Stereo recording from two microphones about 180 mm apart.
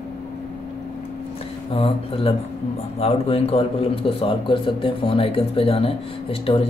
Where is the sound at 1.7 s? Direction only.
30° left (ahead or behind).